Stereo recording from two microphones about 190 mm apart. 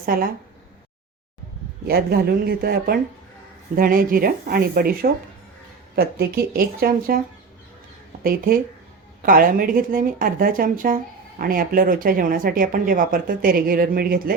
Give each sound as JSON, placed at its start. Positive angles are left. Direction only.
{"t": 0.0, "sound": "speech", "side_deg": -50}
{"t": 1.9, "sound": "speech", "side_deg": -55}
{"t": 8.2, "sound": "speech", "side_deg": -50}